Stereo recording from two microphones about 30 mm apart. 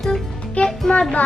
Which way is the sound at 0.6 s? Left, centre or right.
Left.